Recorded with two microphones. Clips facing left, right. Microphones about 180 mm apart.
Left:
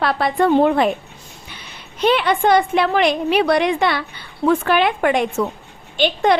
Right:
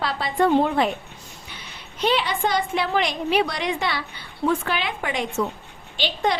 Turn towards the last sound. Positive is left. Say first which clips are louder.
# left 7 dB
turn(degrees=55)  # may be behind; listen again after turning